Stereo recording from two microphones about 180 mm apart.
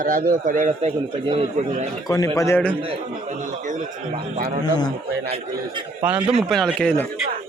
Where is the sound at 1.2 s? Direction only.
30° right (ahead or behind).